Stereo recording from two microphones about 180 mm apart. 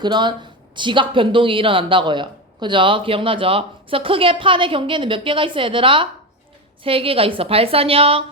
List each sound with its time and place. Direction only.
0.0 s a woman's voice: 25° right (ahead or behind)